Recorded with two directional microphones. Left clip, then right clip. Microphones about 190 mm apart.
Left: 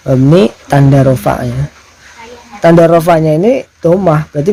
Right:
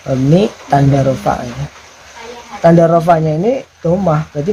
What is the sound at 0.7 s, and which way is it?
Speech, 55° left (ahead or behind).